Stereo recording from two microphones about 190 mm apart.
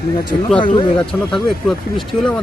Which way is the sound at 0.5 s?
25° left (ahead or behind).